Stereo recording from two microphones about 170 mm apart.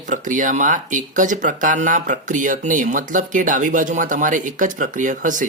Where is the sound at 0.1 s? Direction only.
50° right (ahead or behind).